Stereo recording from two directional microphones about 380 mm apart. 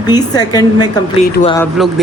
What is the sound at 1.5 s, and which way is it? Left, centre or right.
Speech, centre.